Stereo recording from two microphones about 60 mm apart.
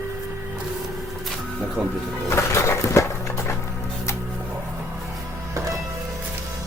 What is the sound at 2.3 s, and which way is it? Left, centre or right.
Music, left.